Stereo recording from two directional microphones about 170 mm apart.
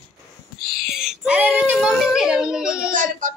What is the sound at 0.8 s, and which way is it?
Child singing, centre (ahead or behind).